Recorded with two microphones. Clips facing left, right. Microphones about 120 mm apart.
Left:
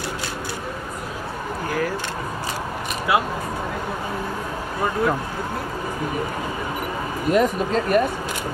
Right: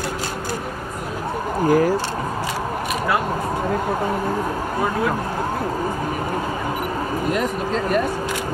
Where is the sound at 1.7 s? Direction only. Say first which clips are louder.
Right 9 dB; 40° right (ahead or behind).